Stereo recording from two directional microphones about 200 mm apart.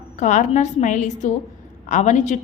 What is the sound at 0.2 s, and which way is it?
A woman's voice, 35° left (ahead or behind).